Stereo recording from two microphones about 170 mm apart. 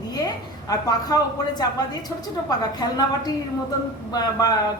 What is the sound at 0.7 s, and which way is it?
A woman's voice, 20° left (ahead or behind).